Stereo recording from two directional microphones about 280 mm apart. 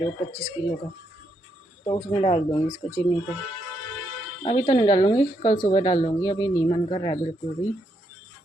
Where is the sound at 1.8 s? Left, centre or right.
Centre.